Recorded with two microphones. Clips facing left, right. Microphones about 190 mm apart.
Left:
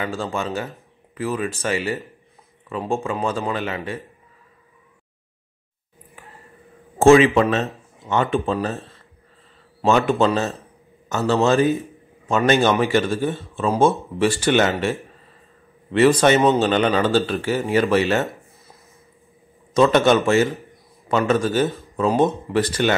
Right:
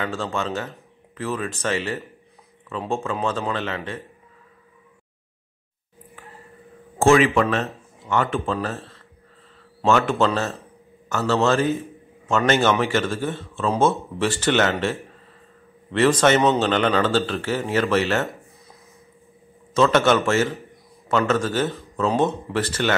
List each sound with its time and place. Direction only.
0.0 s a man's voice: 10° left (ahead or behind)
0.7 s a sound: 10° left (ahead or behind)
1.6 s a man's voice: 10° left (ahead or behind)
7.0 s a man's voice: 20° left (ahead or behind)
18.2 s a sound: centre (ahead or behind)
19.7 s a man's voice: 15° left (ahead or behind)